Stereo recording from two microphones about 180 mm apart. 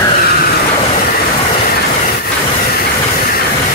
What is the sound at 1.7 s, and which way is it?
Train, 60° left (ahead or behind).